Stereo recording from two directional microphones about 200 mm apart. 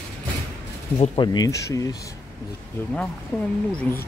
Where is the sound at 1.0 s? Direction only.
20° left (ahead or behind).